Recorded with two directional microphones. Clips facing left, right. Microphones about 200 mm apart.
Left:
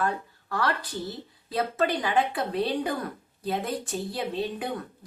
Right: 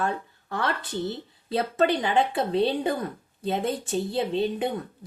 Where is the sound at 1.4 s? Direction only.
25° right (ahead or behind).